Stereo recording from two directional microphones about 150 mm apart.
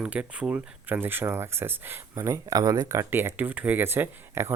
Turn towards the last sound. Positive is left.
turn(degrees=-15)  # may be behind; listen again after turning